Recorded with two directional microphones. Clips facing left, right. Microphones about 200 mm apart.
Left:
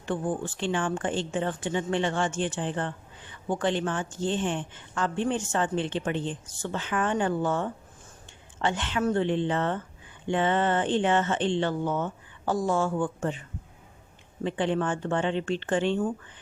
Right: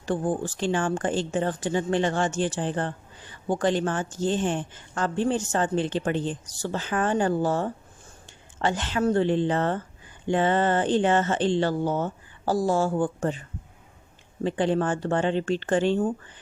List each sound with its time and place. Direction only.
0.0 s speech: 40° right (ahead or behind)
14.4 s speech: 40° right (ahead or behind)